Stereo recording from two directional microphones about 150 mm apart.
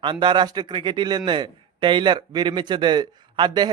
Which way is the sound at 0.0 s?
30° right (ahead or behind).